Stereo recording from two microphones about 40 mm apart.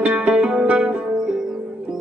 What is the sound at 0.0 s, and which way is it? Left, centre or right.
Music, right.